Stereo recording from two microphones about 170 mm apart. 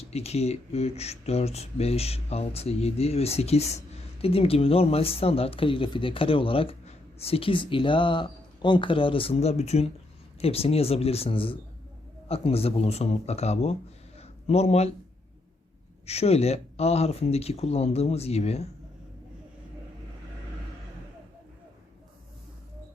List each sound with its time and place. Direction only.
0.0 s speech: 40° left (ahead or behind)
14.2 s a sound: 40° left (ahead or behind)
16.0 s speech: 35° left (ahead or behind)